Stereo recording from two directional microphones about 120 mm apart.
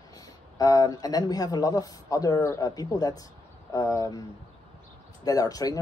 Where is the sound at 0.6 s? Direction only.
30° left (ahead or behind).